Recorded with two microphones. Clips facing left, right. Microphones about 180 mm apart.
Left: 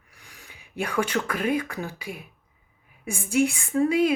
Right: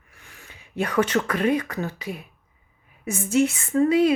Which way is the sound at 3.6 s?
10° left (ahead or behind).